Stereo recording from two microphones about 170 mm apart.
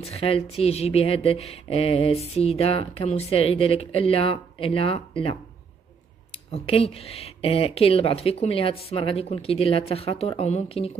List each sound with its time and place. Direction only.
0.0 s speech: 35° left (ahead or behind)
6.5 s speech: 35° left (ahead or behind)